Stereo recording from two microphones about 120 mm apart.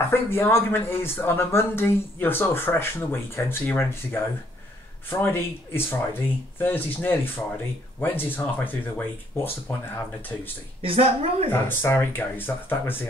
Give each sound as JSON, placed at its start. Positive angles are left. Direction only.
{"t": 0.1, "sound": "speech", "side_deg": 20}
{"t": 10.8, "sound": "speech", "side_deg": -55}
{"t": 11.6, "sound": "speech", "side_deg": 20}